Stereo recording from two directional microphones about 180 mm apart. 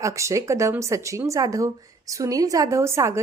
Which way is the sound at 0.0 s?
15° right (ahead or behind).